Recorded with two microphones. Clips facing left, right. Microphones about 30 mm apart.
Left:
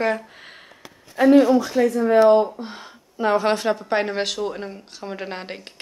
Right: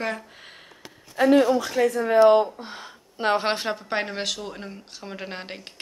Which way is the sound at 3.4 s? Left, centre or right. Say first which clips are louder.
Left 4 dB; right.